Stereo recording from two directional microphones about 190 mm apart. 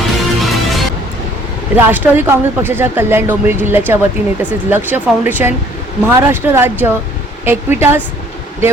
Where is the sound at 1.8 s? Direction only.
10° right (ahead or behind).